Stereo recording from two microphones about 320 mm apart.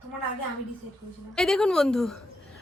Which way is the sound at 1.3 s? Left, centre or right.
Centre.